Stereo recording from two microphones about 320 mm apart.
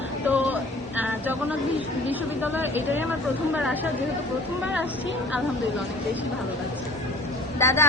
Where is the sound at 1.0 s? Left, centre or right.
Centre.